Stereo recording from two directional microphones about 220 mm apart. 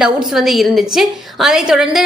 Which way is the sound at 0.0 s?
Centre (ahead or behind).